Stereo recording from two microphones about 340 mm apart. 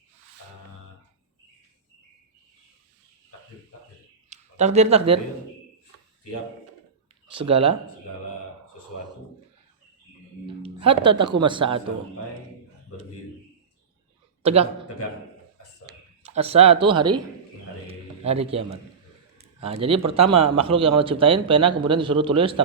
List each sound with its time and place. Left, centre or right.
4.3 s speech: centre
7.3 s a man's voice: centre
10.4 s speech: centre
14.4 s a man's voice: centre
15.9 s speech: centre
17.8 s a sound: centre
20.1 s a man's voice: centre